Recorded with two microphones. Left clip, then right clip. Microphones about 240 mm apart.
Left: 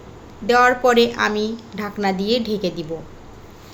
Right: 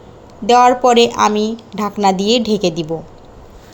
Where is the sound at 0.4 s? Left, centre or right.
Right.